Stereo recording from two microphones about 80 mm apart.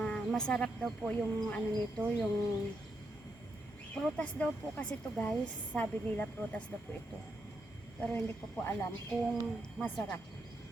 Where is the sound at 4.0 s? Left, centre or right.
Centre.